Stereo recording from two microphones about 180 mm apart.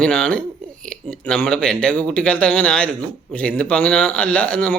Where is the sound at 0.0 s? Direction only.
5° left (ahead or behind).